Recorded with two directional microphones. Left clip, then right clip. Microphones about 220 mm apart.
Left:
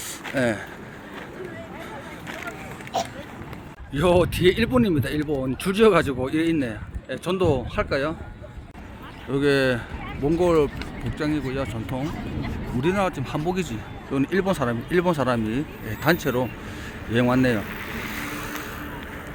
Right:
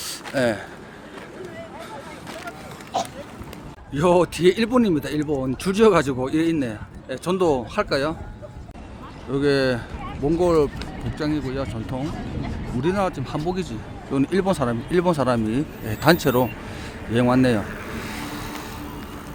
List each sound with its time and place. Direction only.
0.0 s a sound: 15° right (ahead or behind)
2.9 s a sound: 45° left (ahead or behind)
3.9 s speech: centre (ahead or behind)
9.3 s speech: 5° left (ahead or behind)
14.1 s speech: 5° right (ahead or behind)
17.1 s speech: centre (ahead or behind)